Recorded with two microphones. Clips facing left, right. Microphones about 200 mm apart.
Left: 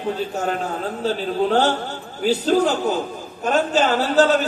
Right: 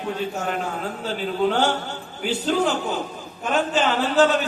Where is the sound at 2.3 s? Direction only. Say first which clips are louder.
Left 4 dB; 40° left (ahead or behind).